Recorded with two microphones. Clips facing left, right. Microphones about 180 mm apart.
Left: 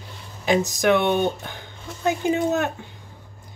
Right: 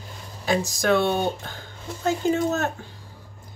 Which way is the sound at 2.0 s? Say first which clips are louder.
Left 1 dB; 15° left (ahead or behind).